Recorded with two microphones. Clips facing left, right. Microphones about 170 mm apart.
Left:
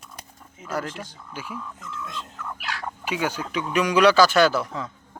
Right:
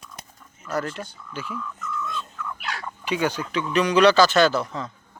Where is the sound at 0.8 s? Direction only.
90° left.